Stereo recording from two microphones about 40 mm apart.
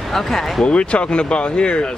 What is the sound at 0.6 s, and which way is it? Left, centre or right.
Speech, left.